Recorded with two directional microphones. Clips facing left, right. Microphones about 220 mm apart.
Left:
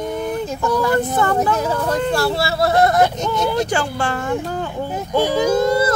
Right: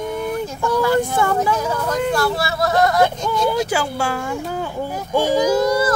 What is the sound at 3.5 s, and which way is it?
Speech, 5° right (ahead or behind).